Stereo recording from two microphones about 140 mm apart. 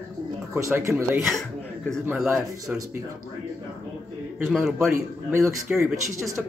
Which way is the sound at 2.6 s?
25° right (ahead or behind).